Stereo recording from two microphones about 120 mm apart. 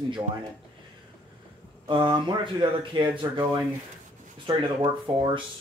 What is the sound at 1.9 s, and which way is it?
Speech, 40° right (ahead or behind).